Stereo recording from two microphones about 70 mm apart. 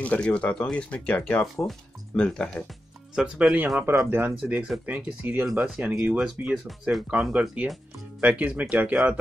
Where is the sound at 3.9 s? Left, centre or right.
Right; by 6.7 s centre.